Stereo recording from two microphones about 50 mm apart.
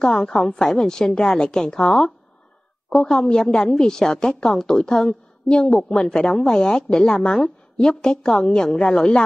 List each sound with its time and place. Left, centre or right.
0.0 s a woman's voice: centre